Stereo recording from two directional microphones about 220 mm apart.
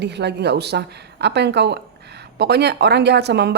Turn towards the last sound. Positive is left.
turn(degrees=-50)  # may be behind; listen again after turning